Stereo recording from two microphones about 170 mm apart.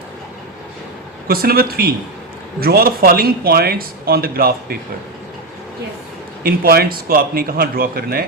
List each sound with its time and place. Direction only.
1.3 s speech: 60° right (ahead or behind)
6.4 s speech: 60° right (ahead or behind)